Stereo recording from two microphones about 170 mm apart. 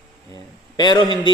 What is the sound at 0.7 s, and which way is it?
Speech, 25° left (ahead or behind).